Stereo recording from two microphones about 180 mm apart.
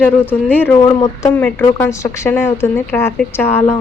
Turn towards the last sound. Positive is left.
turn(degrees=10)  # may be behind; listen again after turning